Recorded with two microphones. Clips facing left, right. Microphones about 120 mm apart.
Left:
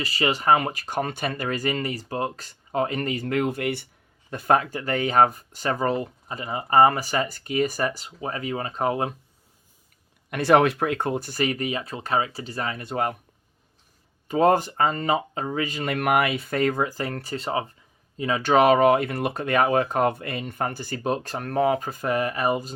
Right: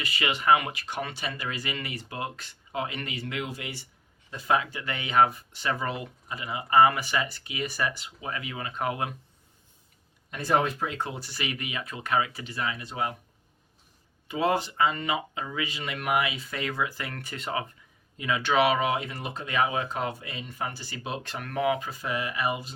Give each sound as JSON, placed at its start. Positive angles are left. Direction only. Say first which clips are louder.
{"t": 0.0, "sound": "speech", "louder": "left 4 dB", "side_deg": 35}
{"t": 10.2, "sound": "speech", "louder": "left 7 dB", "side_deg": 70}
{"t": 14.3, "sound": "speech", "louder": "left 7 dB", "side_deg": 45}